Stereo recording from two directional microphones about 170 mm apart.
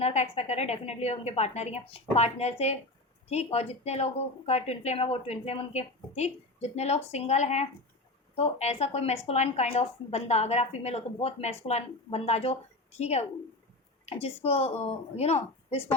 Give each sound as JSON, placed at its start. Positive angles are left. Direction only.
{"t": 0.0, "sound": "speech", "side_deg": 40}